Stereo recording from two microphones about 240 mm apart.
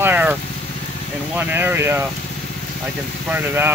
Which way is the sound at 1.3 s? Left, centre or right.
Centre.